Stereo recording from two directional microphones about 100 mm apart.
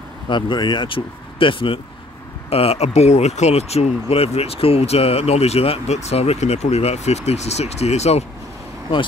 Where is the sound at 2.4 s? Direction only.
85° left.